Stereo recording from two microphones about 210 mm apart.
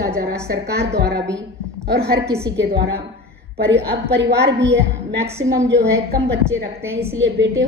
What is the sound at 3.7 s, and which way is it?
A woman's voice, 55° right (ahead or behind).